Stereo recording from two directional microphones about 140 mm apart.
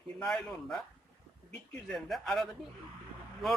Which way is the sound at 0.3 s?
5° left (ahead or behind).